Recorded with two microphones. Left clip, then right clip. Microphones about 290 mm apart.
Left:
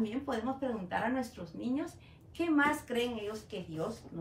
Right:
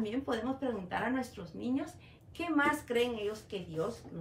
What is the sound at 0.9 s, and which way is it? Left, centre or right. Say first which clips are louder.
A woman's voice: left 1 dB; centre.